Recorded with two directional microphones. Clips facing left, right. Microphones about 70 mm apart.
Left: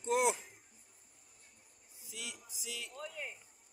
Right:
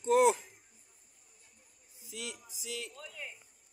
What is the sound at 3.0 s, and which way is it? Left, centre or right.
Speech, left.